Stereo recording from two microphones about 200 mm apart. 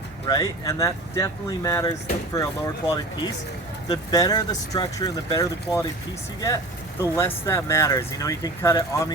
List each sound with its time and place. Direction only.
0.3 s speech: 20° left (ahead or behind)
7.0 s speech: 15° left (ahead or behind)